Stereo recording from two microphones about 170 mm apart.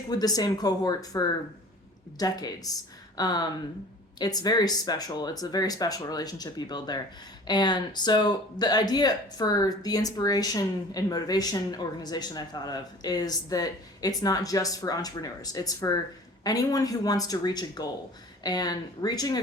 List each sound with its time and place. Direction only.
0.1 s speech: 25° left (ahead or behind)